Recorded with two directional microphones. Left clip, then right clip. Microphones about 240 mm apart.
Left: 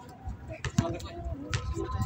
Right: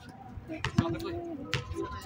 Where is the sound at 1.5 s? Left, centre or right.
Right.